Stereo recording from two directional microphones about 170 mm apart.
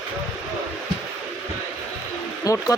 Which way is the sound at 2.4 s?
20° left (ahead or behind).